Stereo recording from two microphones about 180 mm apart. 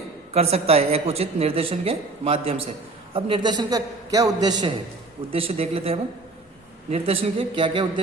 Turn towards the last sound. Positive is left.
turn(degrees=-30)  # may be behind; listen again after turning